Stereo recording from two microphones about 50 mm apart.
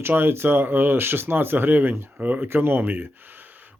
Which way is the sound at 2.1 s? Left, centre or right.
Right.